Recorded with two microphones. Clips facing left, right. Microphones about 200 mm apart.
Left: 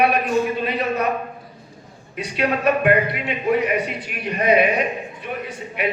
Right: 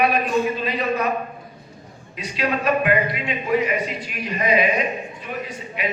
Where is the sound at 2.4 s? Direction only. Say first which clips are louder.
Left 2 dB; 60° left (ahead or behind).